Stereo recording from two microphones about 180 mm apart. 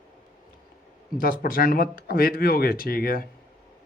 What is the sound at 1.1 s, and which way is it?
Speech, 55° left (ahead or behind).